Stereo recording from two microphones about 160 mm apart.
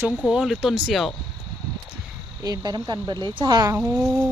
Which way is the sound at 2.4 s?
25° right (ahead or behind).